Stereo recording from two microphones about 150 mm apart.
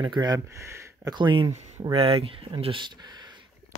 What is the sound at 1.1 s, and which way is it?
Speech, 30° right (ahead or behind).